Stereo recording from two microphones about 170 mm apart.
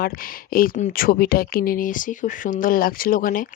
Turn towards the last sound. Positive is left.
turn(degrees=55)  # may be behind; listen again after turning